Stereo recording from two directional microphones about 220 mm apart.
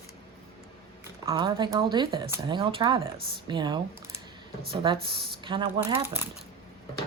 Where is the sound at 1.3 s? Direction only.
20° right (ahead or behind).